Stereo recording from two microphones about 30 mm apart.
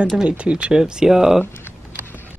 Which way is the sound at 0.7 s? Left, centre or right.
Right.